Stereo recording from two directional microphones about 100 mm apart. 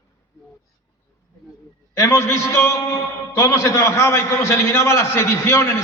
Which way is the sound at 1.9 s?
30° left (ahead or behind).